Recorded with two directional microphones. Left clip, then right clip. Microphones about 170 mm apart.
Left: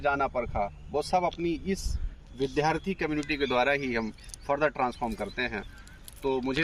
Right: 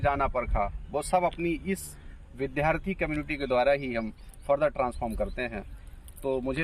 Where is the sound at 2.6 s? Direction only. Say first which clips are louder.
Right 1 dB; 45° right (ahead or behind).